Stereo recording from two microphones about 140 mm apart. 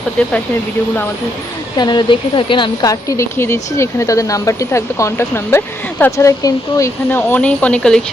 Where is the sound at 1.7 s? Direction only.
30° left (ahead or behind).